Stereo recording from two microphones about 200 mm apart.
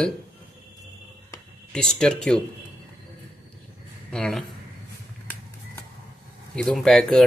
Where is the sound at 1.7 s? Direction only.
5° left (ahead or behind).